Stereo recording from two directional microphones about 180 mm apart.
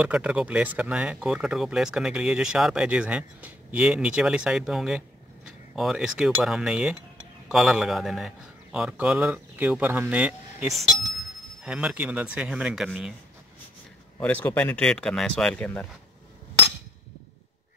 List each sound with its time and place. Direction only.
0.0 s speech: 5° right (ahead or behind)
14.2 s speech: 10° left (ahead or behind)